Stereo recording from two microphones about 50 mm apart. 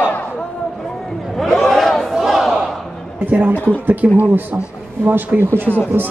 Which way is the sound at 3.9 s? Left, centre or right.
Right.